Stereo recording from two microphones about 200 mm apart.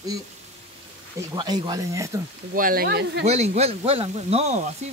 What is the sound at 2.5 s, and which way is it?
Speech, 45° right (ahead or behind).